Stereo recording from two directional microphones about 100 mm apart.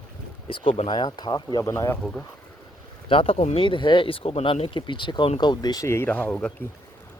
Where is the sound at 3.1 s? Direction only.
70° left (ahead or behind).